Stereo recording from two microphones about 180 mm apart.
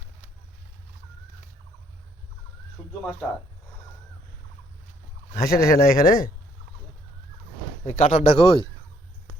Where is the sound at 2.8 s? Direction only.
10° left (ahead or behind).